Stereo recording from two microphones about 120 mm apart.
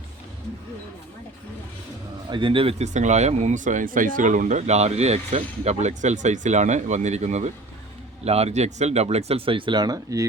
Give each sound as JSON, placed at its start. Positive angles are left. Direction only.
{"t": 2.3, "sound": "a man's voice", "side_deg": -45}
{"t": 2.8, "sound": "speech", "side_deg": -80}
{"t": 8.2, "sound": "speech", "side_deg": -60}